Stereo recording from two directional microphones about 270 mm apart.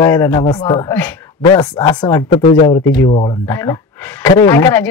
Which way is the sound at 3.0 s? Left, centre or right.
Left.